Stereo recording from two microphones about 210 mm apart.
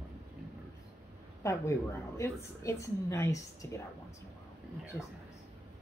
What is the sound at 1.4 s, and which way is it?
A woman's voice, 15° left (ahead or behind).